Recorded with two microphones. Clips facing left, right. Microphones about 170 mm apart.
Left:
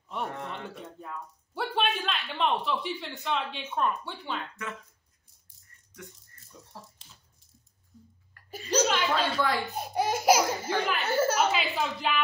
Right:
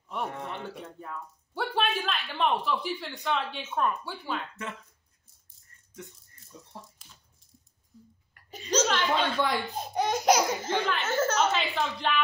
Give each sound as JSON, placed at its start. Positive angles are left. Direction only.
{"t": 0.1, "sound": "speech", "side_deg": 0}
{"t": 6.5, "sound": "dog", "side_deg": -20}
{"t": 8.5, "sound": "a sound", "side_deg": 10}
{"t": 9.1, "sound": "speech", "side_deg": -20}
{"t": 9.8, "sound": "a woman's voice", "side_deg": 10}